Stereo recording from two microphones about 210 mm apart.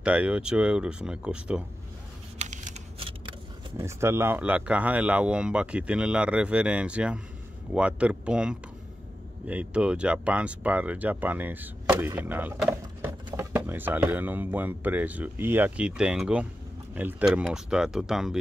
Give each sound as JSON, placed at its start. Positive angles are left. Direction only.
{"t": 0.0, "sound": "speech", "side_deg": -5}
{"t": 2.3, "sound": "a sound", "side_deg": -35}
{"t": 3.7, "sound": "speech", "side_deg": -10}